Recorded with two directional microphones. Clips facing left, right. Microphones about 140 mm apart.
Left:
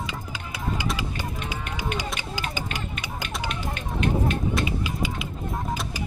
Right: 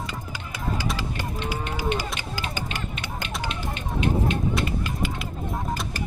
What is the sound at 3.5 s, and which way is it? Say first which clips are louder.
Music: even; 25° right (ahead or behind).